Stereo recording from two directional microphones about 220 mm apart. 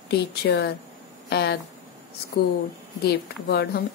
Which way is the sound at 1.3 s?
45° left (ahead or behind).